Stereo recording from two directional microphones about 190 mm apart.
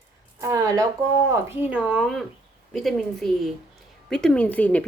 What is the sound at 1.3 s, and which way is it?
A woman's voice, 10° right (ahead or behind).